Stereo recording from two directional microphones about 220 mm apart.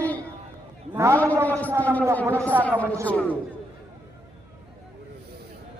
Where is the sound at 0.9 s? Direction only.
10° right (ahead or behind).